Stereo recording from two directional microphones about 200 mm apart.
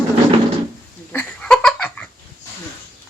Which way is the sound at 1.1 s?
5° left (ahead or behind).